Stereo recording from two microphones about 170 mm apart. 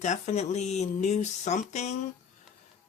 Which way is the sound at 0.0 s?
45° left (ahead or behind).